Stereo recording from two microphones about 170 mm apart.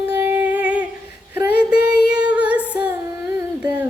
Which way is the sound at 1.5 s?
70° left (ahead or behind).